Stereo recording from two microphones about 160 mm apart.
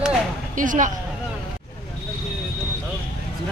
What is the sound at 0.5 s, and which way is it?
Speech, 55° right (ahead or behind).